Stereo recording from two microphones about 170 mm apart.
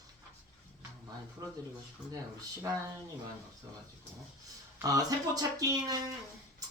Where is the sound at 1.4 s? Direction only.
20° right (ahead or behind).